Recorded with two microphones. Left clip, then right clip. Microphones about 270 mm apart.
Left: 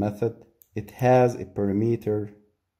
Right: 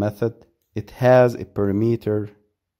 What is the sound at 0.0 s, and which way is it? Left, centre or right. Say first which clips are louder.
Speech: right 3 dB; right.